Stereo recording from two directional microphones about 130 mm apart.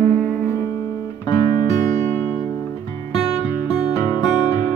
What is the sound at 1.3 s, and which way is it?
Music, 35° left (ahead or behind).